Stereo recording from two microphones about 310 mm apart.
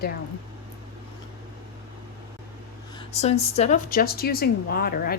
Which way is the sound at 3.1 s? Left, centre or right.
Centre.